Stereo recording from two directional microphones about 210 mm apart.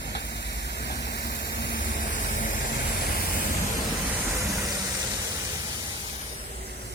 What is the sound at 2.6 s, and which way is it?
Vehicle, 55° left (ahead or behind).